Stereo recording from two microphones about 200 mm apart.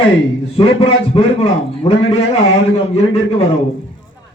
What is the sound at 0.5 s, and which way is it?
A man's voice, 30° left (ahead or behind).